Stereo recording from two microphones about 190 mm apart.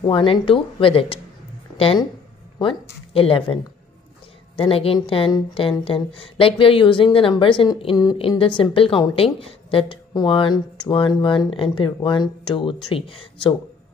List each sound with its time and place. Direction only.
0.0 s a woman's voice: 25° left (ahead or behind)
3.1 s speech: 30° left (ahead or behind)
4.6 s a woman's voice: 30° left (ahead or behind)